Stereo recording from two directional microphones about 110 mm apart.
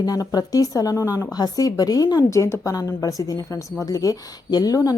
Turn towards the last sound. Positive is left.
turn(degrees=35)  # may be behind; listen again after turning